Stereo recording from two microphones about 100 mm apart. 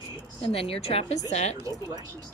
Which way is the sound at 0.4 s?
70° left (ahead or behind).